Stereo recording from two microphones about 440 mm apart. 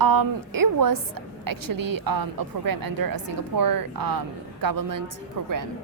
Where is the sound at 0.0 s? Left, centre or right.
Right.